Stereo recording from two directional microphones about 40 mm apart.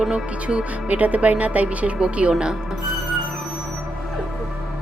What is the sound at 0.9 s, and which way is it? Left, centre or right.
Speech, right.